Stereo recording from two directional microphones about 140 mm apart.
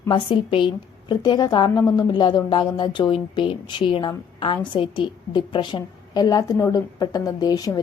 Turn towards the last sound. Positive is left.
turn(degrees=25)  # may be behind; listen again after turning